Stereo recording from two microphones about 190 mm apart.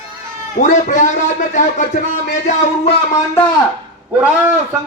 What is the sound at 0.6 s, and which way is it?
Speech, 40° left (ahead or behind).